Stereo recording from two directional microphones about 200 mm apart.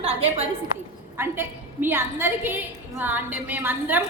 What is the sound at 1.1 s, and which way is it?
A woman's voice, 10° right (ahead or behind).